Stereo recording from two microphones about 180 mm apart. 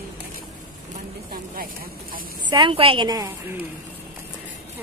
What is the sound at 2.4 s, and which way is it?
Speech, 25° right (ahead or behind).